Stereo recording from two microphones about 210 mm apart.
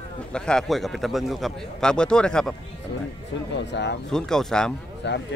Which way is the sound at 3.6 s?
55° left (ahead or behind).